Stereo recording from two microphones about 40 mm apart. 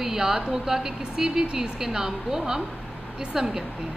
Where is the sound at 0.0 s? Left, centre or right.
Centre.